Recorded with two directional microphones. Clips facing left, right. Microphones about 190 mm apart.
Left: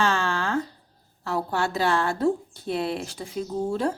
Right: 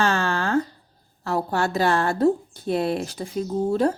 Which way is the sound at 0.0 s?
45° right (ahead or behind).